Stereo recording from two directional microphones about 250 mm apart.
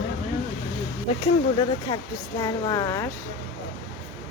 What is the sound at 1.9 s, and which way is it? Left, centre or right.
Speech, centre.